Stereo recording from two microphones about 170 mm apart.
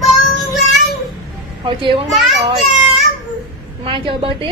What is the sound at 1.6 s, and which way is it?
Speech, 30° right (ahead or behind).